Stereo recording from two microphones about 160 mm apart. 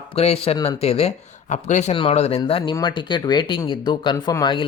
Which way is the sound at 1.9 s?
35° left (ahead or behind).